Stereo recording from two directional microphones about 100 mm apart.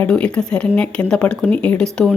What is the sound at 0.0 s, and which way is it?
A woman's voice, 10° left (ahead or behind).